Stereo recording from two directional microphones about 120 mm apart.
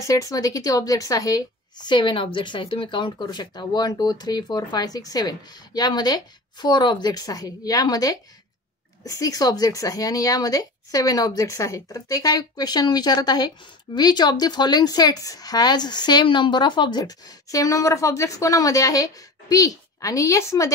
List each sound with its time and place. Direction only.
0.0 s speech: 30° left (ahead or behind)